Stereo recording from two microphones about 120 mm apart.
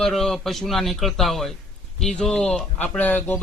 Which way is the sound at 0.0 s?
Centre (ahead or behind).